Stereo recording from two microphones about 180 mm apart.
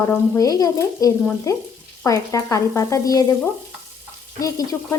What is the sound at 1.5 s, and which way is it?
Stir, 15° left (ahead or behind).